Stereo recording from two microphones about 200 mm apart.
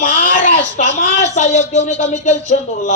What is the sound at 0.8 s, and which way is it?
A man's voice, 35° left (ahead or behind).